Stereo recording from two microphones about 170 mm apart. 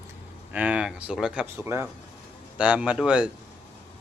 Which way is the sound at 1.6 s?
15° right (ahead or behind).